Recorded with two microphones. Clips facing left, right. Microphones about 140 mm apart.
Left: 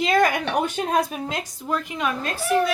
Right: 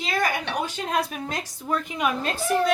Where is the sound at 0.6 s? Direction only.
50° left (ahead or behind).